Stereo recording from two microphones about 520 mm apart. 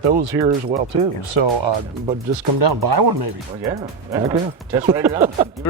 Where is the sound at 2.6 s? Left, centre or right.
Right.